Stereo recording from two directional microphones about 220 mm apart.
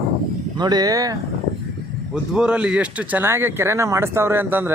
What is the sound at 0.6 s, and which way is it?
Speech, 20° right (ahead or behind).